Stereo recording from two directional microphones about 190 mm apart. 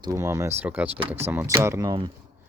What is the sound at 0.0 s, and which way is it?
Speech, 15° right (ahead or behind).